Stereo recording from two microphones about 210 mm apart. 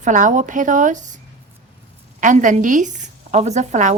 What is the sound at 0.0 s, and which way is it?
A woman's voice, 35° right (ahead or behind).